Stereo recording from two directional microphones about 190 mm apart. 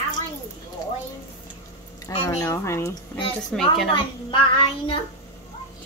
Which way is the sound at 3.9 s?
25° left (ahead or behind).